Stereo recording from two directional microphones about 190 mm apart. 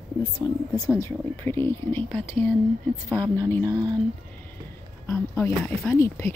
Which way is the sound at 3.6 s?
20° right (ahead or behind).